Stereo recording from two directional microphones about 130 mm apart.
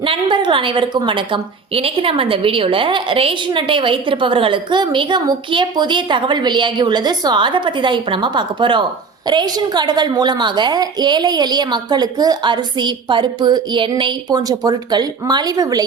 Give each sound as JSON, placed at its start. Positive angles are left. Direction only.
{"t": 0.0, "sound": "a woman's voice", "side_deg": -40}